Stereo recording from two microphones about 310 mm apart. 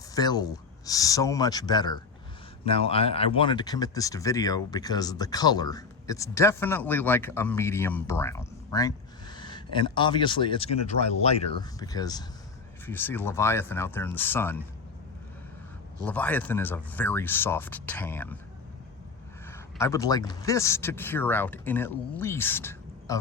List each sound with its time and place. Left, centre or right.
0.1 s speech: centre
16.0 s speech: centre
19.5 s speech: centre